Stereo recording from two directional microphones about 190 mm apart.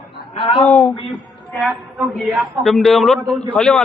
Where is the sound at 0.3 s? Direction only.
25° left (ahead or behind).